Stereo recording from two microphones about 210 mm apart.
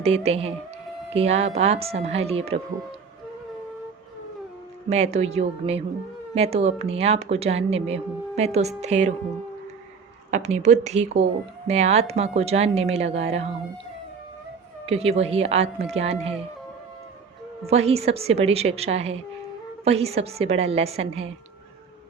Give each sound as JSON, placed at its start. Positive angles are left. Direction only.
{"t": 0.0, "sound": "speech", "side_deg": -30}
{"t": 4.9, "sound": "speech", "side_deg": -30}
{"t": 10.3, "sound": "speech", "side_deg": -35}
{"t": 14.8, "sound": "speech", "side_deg": -30}
{"t": 17.7, "sound": "speech", "side_deg": -30}